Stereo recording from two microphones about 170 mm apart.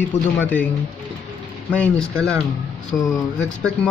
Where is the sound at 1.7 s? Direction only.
5° left (ahead or behind).